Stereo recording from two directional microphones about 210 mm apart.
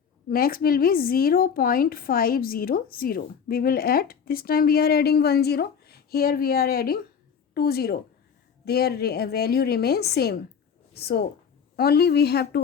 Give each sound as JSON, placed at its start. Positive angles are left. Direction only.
{"t": 0.3, "sound": "a woman's voice", "side_deg": 45}